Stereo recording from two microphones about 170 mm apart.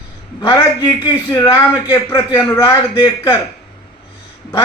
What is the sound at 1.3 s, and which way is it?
A man's voice, 20° left (ahead or behind).